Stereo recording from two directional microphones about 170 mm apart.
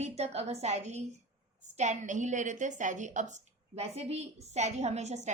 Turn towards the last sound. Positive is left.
turn(degrees=-45)  # may be behind; listen again after turning